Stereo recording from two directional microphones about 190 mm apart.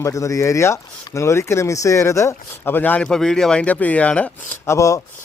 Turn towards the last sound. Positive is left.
turn(degrees=15)  # may be behind; listen again after turning